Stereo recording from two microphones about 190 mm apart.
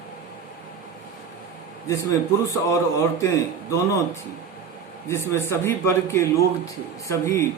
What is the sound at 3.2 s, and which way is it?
A man's voice, 15° left (ahead or behind).